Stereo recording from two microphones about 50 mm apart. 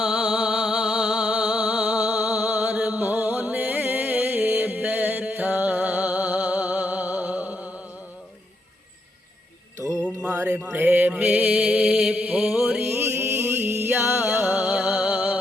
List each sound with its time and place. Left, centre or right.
0.0 s a sound: centre
1.3 s a sound: right
3.0 s music: right
9.8 s music: centre
10.3 s mantra: right
10.7 s mantra: right
11.9 s mantra: centre
12.1 s mantra: right
12.4 s music: centre
12.8 s music: right